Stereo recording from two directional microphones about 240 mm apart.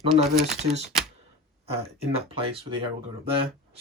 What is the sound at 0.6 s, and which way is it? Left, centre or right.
Speech, right.